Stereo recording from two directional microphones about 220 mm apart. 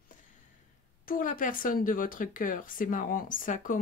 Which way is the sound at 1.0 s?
40° left (ahead or behind).